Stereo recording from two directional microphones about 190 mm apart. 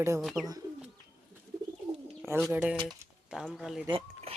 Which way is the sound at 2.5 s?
5° right (ahead or behind).